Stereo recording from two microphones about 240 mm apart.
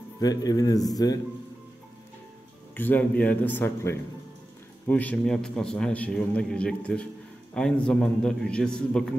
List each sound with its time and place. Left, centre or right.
0.2 s a man's voice: centre
2.7 s a man's voice: centre